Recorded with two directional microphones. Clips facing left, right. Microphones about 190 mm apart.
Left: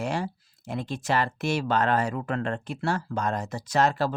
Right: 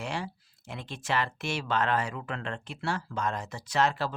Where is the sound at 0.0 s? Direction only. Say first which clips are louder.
Left 6 dB; 40° left (ahead or behind).